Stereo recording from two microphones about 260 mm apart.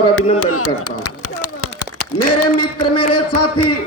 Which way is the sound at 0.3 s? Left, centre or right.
Left.